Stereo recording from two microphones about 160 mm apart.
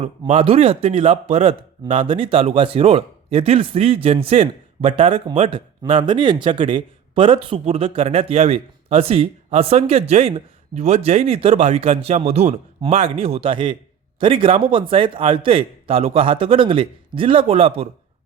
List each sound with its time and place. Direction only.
0.0 s a man's voice: 40° right (ahead or behind)